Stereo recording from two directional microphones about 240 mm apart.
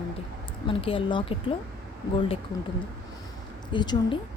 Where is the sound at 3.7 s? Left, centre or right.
Centre.